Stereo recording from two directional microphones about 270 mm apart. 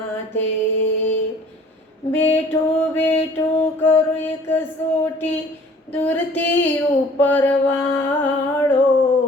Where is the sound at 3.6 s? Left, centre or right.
Centre.